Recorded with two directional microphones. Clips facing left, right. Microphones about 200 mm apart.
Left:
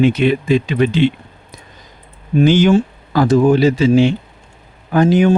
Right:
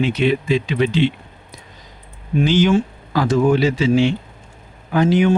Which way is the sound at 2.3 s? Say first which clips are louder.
Left 4 dB; 50° left (ahead or behind).